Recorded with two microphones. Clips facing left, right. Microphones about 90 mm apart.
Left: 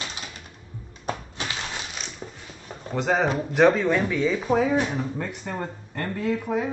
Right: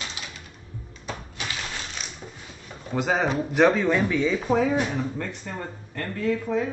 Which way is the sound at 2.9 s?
Centre (ahead or behind).